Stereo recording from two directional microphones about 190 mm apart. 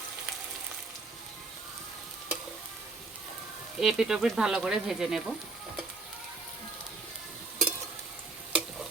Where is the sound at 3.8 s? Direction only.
Centre (ahead or behind).